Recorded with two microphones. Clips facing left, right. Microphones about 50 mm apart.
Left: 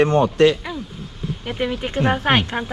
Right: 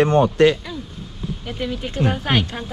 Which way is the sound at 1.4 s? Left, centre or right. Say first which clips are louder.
Left 4 dB; left.